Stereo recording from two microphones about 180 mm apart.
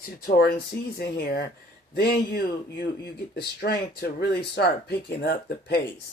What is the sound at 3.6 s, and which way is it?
Speech, 65° left (ahead or behind).